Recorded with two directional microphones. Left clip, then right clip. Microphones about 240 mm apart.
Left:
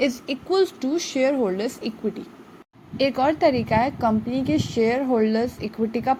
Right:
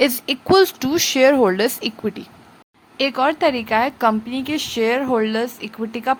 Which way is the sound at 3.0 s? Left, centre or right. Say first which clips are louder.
Right 2 dB; centre.